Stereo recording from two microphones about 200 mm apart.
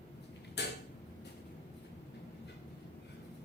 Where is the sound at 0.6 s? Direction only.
55° left (ahead or behind).